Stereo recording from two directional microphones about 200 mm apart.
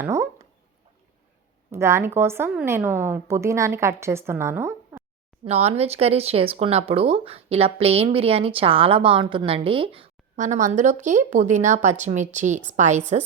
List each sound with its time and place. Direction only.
0.0 s speech: 15° right (ahead or behind)
1.7 s a woman's voice: 15° right (ahead or behind)
5.5 s speech: 30° right (ahead or behind)